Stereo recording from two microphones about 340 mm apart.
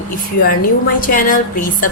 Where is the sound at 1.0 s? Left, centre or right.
Left.